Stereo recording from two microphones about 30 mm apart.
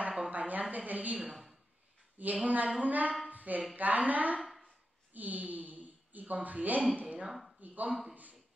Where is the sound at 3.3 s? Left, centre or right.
Right.